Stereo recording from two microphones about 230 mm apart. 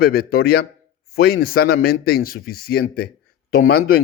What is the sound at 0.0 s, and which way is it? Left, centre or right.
A man's voice, left.